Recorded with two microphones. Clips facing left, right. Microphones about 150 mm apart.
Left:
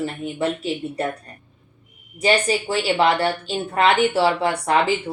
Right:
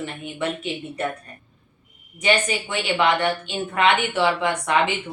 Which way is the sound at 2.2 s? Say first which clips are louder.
Left 3 dB; 35° left (ahead or behind).